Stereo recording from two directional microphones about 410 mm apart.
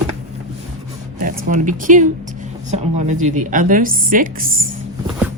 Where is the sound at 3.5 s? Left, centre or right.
Centre.